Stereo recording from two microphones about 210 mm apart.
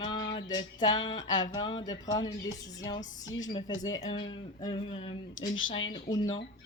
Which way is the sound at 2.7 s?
20° left (ahead or behind).